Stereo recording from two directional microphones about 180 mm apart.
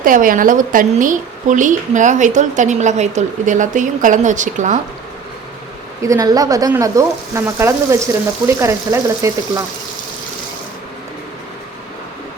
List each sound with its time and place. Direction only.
0.0 s a woman's voice: 50° right (ahead or behind)
6.0 s frying: 20° right (ahead or behind)